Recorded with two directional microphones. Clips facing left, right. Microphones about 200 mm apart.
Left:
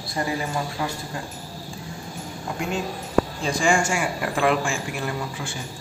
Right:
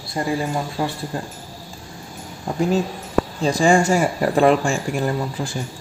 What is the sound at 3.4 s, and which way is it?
Speech, 35° right (ahead or behind).